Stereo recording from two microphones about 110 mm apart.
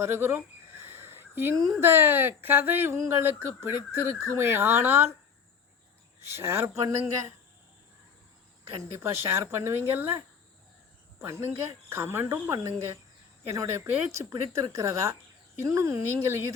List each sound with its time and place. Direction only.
0.0 s speech: 20° right (ahead or behind)
6.3 s speech: 20° right (ahead or behind)
9.0 s speech: 25° right (ahead or behind)
11.2 s speech: 25° right (ahead or behind)